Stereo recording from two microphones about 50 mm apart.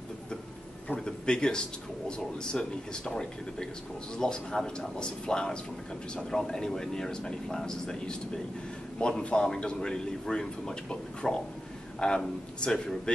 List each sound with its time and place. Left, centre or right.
0.9 s speech: centre